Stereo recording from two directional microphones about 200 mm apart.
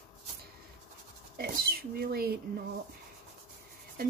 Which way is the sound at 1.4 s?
50° right (ahead or behind).